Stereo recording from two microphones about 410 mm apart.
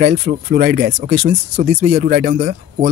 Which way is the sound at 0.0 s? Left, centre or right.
Right.